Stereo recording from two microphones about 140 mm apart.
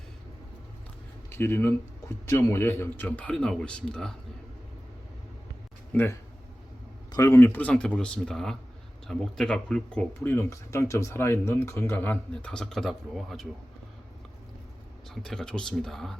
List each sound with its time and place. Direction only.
1.3 s speech: 15° left (ahead or behind)
5.9 s speech: 15° left (ahead or behind)
10.2 s speech: 15° left (ahead or behind); by 13.5 s centre (ahead or behind)
15.1 s speech: 5° left (ahead or behind)